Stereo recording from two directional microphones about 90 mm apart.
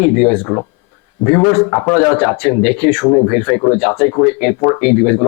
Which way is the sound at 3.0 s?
25° left (ahead or behind).